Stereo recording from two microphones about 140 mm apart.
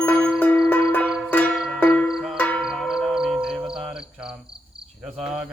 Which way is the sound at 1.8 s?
10° left (ahead or behind).